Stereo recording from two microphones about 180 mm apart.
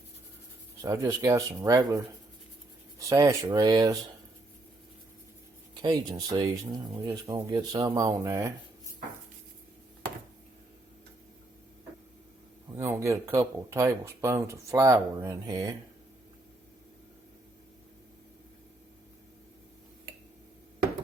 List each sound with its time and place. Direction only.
0.8 s speech: 15° right (ahead or behind)
5.8 s speech: 25° right (ahead or behind)
12.7 s speech: 15° right (ahead or behind)